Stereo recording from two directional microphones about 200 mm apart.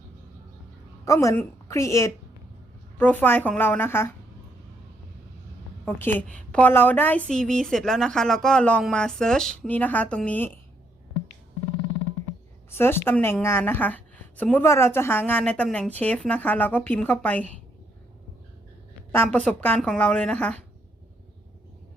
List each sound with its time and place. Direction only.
1.0 s a woman's voice: 15° left (ahead or behind)
6.1 s a woman's voice: 5° left (ahead or behind)
12.7 s a woman's voice: 10° left (ahead or behind)
19.1 s a woman's voice: 5° left (ahead or behind)